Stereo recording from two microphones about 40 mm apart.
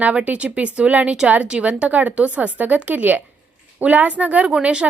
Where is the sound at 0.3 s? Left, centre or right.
Right.